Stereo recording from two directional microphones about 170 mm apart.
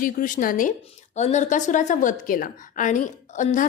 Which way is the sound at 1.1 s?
45° left (ahead or behind).